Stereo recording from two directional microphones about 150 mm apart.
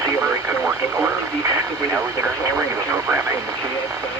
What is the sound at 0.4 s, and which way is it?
Radio, 15° right (ahead or behind).